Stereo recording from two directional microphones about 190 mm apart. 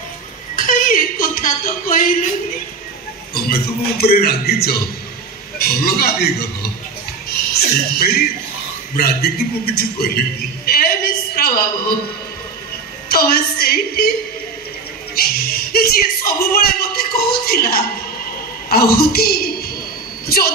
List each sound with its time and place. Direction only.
0.6 s speech: 45° left (ahead or behind)
3.3 s a man's voice: 55° left (ahead or behind)
10.6 s a sound: 55° left (ahead or behind)
13.1 s a woman's voice: 55° left (ahead or behind)
15.1 s a woman's voice: 55° left (ahead or behind)